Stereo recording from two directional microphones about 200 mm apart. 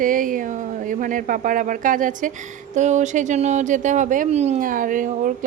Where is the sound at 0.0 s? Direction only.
40° right (ahead or behind).